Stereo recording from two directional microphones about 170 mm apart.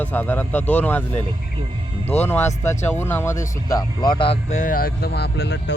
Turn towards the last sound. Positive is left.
turn(degrees=85)